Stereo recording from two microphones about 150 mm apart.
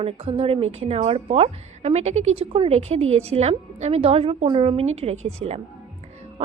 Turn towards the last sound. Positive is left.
turn(degrees=-45)  # may be behind; listen again after turning